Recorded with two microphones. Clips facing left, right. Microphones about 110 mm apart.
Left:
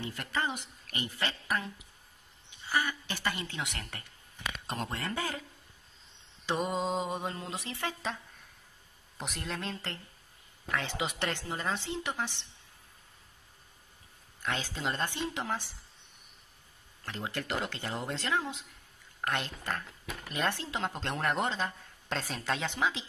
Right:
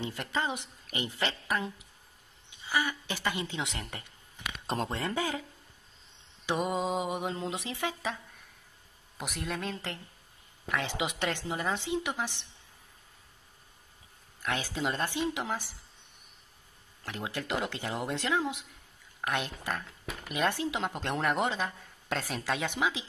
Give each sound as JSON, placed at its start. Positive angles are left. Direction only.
{"t": 0.0, "sound": "a woman's voice", "side_deg": -15}
{"t": 6.4, "sound": "speech", "side_deg": -15}
{"t": 9.2, "sound": "speech", "side_deg": -5}
{"t": 10.7, "sound": "speech", "side_deg": -15}
{"t": 14.4, "sound": "speech", "side_deg": -10}
{"t": 17.0, "sound": "speech", "side_deg": -10}